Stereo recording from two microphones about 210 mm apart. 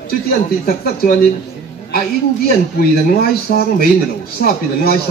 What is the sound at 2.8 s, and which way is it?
A man's voice, 50° left (ahead or behind).